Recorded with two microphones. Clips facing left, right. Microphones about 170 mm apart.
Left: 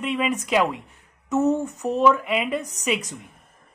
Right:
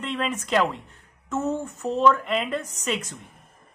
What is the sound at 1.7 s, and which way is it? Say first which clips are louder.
Speech: left 1 dB; 15° left (ahead or behind).